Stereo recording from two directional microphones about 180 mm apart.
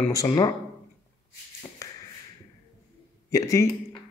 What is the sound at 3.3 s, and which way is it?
Speech, 20° left (ahead or behind).